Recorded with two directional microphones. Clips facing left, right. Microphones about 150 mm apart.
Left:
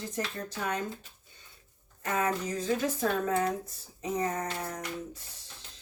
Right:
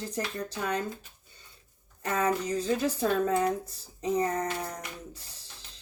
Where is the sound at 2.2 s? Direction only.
35° right (ahead or behind).